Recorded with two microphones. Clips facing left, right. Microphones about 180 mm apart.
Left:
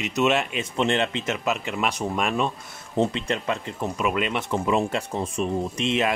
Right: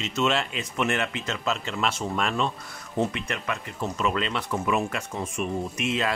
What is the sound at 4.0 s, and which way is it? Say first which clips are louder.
Speech: left 2 dB; 15° left (ahead or behind).